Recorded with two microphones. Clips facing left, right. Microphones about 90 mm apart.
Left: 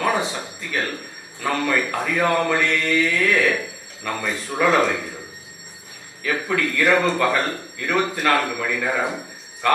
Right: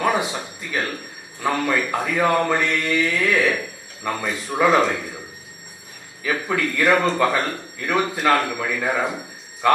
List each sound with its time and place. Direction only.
0.0 s a man's voice: 10° right (ahead or behind)
4.8 s speech: centre (ahead or behind)
6.5 s a man's voice: 10° right (ahead or behind)
7.3 s a man's voice: centre (ahead or behind)
9.0 s a sound: centre (ahead or behind)